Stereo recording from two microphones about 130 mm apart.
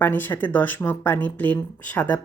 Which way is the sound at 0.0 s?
15° left (ahead or behind).